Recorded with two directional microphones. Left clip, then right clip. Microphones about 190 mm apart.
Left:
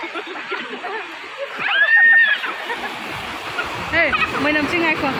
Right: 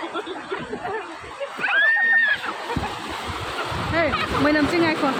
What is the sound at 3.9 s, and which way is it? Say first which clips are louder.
Speech: left 5 dB; 15° right (ahead or behind).